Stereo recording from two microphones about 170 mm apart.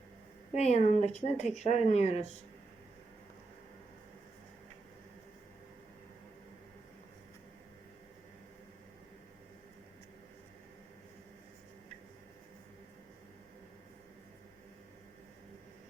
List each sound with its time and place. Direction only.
0.5 s speech: 40° left (ahead or behind)